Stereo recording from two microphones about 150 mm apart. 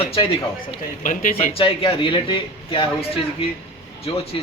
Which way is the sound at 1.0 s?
60° left (ahead or behind).